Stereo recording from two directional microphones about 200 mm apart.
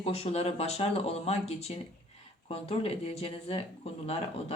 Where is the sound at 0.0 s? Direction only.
30° left (ahead or behind).